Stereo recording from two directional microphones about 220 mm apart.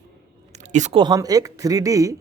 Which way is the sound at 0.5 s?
35° right (ahead or behind).